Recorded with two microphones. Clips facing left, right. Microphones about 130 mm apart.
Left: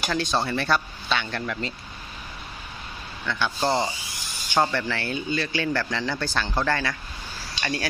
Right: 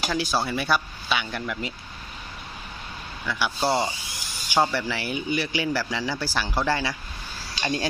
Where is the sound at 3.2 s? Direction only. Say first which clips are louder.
Even; 10° right (ahead or behind).